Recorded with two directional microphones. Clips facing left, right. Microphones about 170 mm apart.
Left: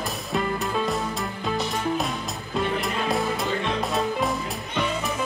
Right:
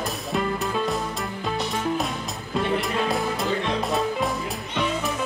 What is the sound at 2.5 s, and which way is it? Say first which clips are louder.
Music: right 2 dB; centre (ahead or behind).